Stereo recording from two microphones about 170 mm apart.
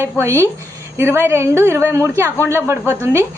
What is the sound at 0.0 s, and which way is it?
A woman's voice, 15° right (ahead or behind).